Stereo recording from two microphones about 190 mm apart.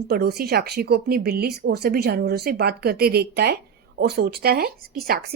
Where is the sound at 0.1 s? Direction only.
55° right (ahead or behind).